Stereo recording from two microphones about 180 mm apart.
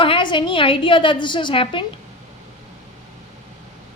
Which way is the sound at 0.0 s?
25° left (ahead or behind).